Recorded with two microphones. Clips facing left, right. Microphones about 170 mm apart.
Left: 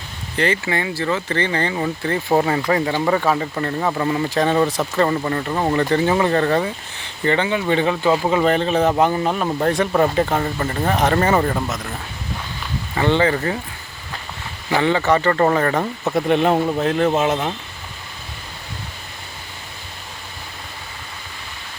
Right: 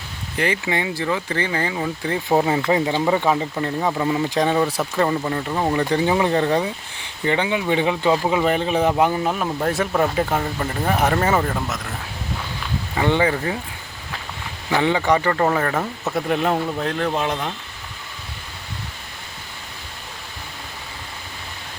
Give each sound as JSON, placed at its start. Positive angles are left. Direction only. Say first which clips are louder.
{"t": 0.3, "sound": "speech", "louder": "left 2 dB", "side_deg": -10}
{"t": 2.6, "sound": "speech", "louder": "even", "side_deg": -15}
{"t": 5.9, "sound": "speech", "louder": "left 1 dB", "side_deg": -10}
{"t": 8.0, "sound": "speech", "louder": "left 2 dB", "side_deg": 0}
{"t": 13.0, "sound": "speech", "louder": "left 2 dB", "side_deg": -10}
{"t": 14.8, "sound": "speech", "louder": "left 1 dB", "side_deg": -15}
{"t": 16.6, "sound": "a man's voice", "louder": "left 5 dB", "side_deg": 15}
{"t": 16.8, "sound": "speech", "louder": "left 5 dB", "side_deg": 5}